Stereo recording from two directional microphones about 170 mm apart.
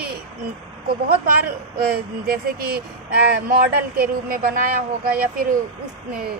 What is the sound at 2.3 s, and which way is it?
A woman's voice, 60° right (ahead or behind).